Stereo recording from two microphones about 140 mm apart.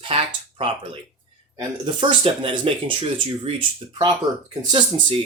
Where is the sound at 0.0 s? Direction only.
40° right (ahead or behind).